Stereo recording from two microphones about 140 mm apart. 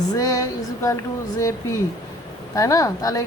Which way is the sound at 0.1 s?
25° left (ahead or behind).